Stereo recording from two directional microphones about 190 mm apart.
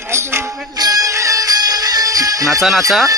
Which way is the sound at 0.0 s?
15° right (ahead or behind).